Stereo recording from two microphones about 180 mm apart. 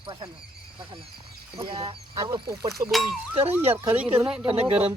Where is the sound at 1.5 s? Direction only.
30° right (ahead or behind).